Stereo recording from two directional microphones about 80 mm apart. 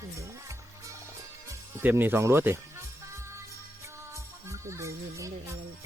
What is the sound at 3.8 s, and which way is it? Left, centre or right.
Music, right.